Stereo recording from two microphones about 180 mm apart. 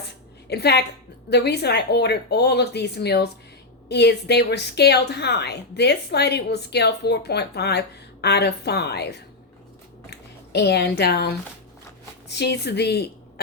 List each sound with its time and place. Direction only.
0.5 s a woman's voice: 65° left (ahead or behind)